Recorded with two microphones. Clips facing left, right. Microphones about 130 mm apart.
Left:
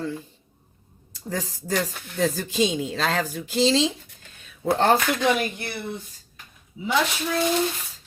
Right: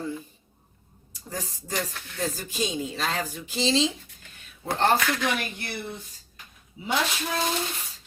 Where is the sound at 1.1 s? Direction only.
90° left.